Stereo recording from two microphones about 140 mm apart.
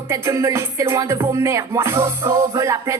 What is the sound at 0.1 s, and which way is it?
Music, 20° right (ahead or behind).